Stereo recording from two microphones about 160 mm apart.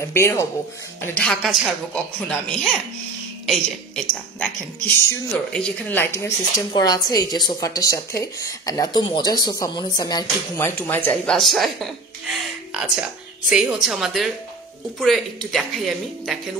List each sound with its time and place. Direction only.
0.0 s speech: 15° left (ahead or behind)
1.0 s a woman's voice: 5° left (ahead or behind)
13.5 s a woman's voice: 5° right (ahead or behind)